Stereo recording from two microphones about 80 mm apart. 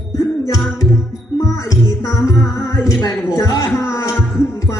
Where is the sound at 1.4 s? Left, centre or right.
Left.